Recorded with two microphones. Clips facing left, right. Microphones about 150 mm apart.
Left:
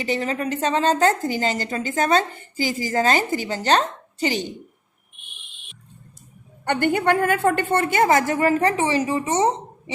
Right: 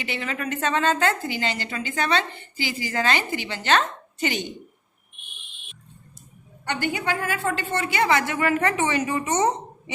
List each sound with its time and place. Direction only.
0.0 s a woman's voice: 40° left (ahead or behind)
6.7 s a woman's voice: 55° left (ahead or behind); by 9.9 s 30° left (ahead or behind)